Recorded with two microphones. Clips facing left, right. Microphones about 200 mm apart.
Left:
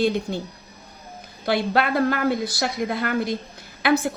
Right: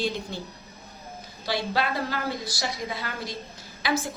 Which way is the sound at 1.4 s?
55° left (ahead or behind).